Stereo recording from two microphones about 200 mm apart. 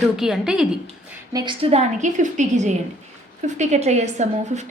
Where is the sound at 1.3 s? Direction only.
20° right (ahead or behind).